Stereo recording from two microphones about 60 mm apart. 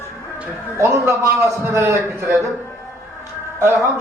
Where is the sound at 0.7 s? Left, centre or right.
Right.